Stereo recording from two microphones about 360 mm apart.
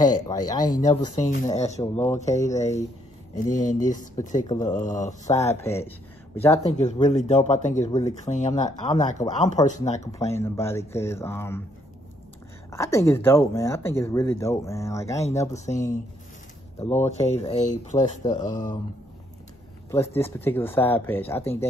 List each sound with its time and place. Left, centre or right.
0.0 s speech: centre
2.1 s speech: centre
5.2 s speech: centre
6.6 s speech: centre
12.7 s speech: centre
16.7 s speech: centre
19.9 s speech: centre